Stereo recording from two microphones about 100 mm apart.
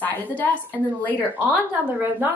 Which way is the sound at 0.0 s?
15° left (ahead or behind).